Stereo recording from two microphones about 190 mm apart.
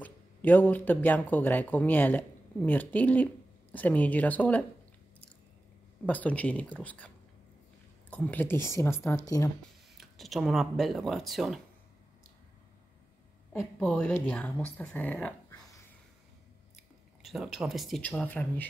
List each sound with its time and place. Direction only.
0.0 s speech: 10° left (ahead or behind)
6.0 s speech: 10° left (ahead or behind)
8.1 s speech: 10° left (ahead or behind)
9.9 s speech: centre (ahead or behind)
13.5 s a woman's voice: 10° left (ahead or behind)
16.7 s speech: centre (ahead or behind)